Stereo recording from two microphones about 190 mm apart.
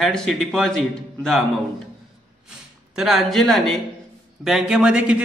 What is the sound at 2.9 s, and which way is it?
A man's voice, centre (ahead or behind).